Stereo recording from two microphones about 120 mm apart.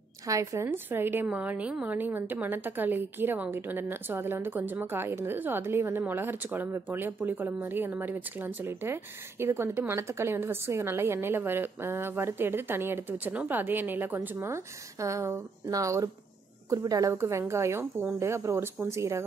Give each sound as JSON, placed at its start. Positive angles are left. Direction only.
{"t": 0.3, "sound": "a woman's voice", "side_deg": -25}